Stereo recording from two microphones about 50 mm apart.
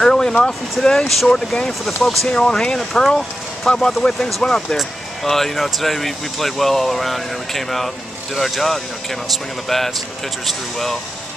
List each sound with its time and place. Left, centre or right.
0.0 s a sound: centre
0.3 s speech: centre
1.0 s speech: centre